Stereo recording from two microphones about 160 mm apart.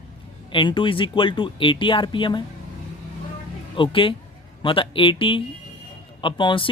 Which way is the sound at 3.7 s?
30° left (ahead or behind).